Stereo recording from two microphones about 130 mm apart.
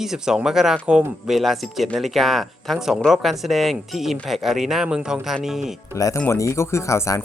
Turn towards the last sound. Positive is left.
turn(degrees=25)  # may be behind; listen again after turning